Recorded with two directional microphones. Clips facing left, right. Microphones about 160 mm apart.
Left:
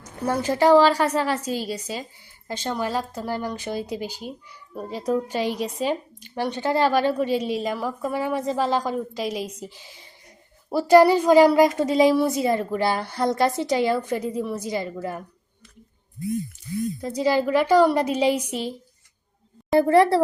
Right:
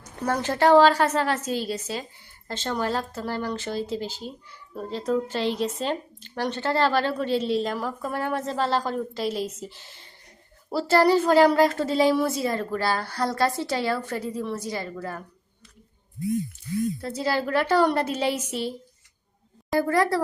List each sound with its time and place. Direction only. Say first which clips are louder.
0.3 s speech: left 2 dB; 10° left (ahead or behind)
17.0 s speech: left 5 dB; 15° left (ahead or behind)
19.7 s a woman's voice: left 6 dB; 25° left (ahead or behind)